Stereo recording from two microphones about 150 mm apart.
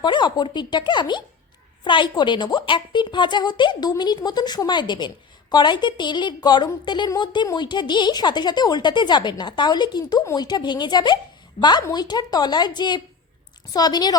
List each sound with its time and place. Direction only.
0.0 s a woman's voice: 30° left (ahead or behind)